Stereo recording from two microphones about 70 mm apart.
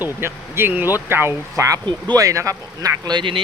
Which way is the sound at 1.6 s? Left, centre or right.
Right.